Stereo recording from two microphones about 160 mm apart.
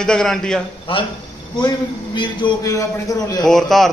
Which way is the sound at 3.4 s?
Centre (ahead or behind).